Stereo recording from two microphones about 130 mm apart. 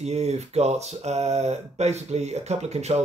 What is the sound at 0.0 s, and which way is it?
Speech, 55° right (ahead or behind).